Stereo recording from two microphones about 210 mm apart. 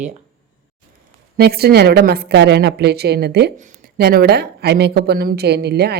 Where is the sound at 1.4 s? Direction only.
50° right (ahead or behind).